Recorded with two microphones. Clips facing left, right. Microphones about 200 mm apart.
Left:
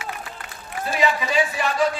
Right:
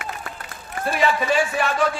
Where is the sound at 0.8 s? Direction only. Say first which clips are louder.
Right 2 dB; 55° right (ahead or behind).